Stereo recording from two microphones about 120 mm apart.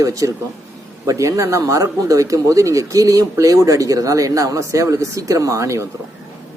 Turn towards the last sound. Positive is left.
turn(degrees=-25)  # may be behind; listen again after turning